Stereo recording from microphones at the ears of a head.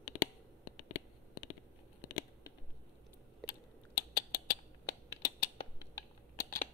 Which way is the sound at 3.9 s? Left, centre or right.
Left.